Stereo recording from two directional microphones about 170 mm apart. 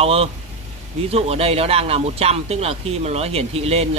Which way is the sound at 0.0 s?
35° right (ahead or behind).